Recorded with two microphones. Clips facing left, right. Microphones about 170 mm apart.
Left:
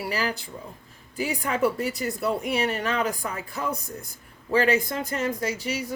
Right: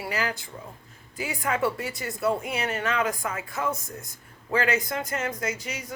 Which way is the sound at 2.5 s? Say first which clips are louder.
Left 3 dB; 35° left (ahead or behind).